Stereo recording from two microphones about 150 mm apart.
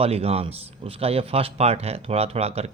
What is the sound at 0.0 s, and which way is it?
Speech, 40° right (ahead or behind).